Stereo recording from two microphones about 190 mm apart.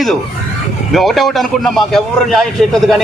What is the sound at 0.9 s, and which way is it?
A man's voice, centre (ahead or behind).